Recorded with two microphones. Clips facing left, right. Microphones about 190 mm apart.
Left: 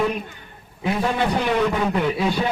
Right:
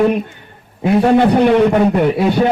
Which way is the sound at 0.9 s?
60° right (ahead or behind).